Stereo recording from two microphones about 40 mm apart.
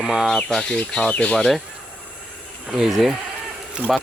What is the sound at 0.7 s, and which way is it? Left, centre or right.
Speech, left.